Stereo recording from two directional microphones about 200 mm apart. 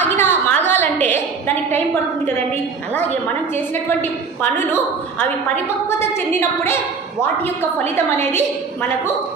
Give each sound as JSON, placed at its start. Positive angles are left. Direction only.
{"t": 0.0, "sound": "a sound", "side_deg": 10}
{"t": 1.1, "sound": "a woman's voice", "side_deg": 10}
{"t": 6.6, "sound": "a woman's voice", "side_deg": 10}